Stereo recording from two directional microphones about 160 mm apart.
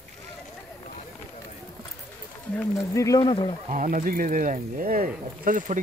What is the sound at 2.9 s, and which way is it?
Speech, 20° left (ahead or behind).